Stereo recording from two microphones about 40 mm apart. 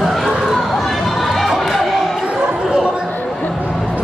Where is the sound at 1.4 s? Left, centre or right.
Centre.